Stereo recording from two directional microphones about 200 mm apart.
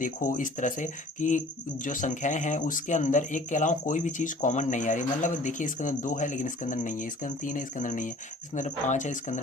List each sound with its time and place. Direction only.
0.0 s speech: 40° left (ahead or behind)